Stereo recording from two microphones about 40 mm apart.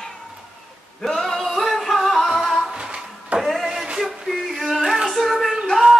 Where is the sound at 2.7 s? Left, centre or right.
Centre.